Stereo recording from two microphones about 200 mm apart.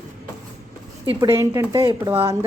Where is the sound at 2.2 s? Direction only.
15° right (ahead or behind).